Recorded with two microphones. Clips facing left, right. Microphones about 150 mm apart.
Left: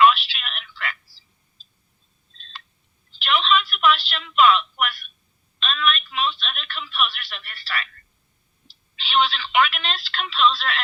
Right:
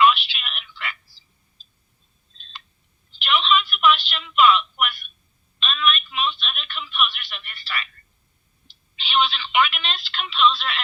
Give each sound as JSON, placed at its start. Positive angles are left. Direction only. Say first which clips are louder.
{"t": 0.0, "sound": "telephone", "louder": "left 1 dB", "side_deg": 40}
{"t": 3.2, "sound": "telephone", "louder": "even", "side_deg": 35}
{"t": 3.8, "sound": "a sound", "louder": "right 2 dB", "side_deg": 40}
{"t": 5.5, "sound": "telephone", "louder": "even", "side_deg": 40}